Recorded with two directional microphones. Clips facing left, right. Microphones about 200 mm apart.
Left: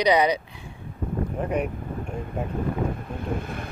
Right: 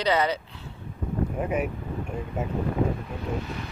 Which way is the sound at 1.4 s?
5° right (ahead or behind).